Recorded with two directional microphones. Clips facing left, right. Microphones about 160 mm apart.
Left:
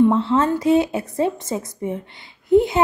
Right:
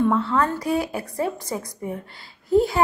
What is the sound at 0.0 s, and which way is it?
A woman's voice, 25° left (ahead or behind).